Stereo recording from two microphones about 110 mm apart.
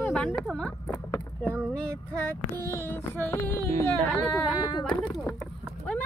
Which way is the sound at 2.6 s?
25° left (ahead or behind).